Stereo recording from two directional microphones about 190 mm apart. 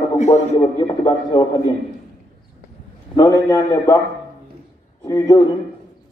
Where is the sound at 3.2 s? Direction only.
20° left (ahead or behind).